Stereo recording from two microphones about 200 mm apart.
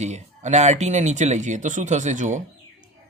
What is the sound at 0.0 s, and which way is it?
Speech, 35° right (ahead or behind).